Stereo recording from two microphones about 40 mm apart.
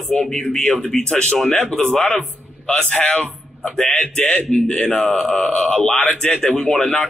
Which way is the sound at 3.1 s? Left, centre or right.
Left.